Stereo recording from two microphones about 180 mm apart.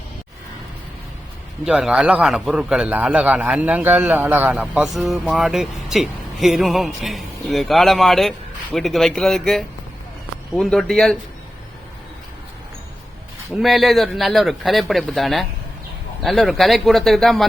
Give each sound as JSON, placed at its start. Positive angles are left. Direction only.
{"t": 1.6, "sound": "a man's voice", "side_deg": -5}
{"t": 13.6, "sound": "a man's voice", "side_deg": 0}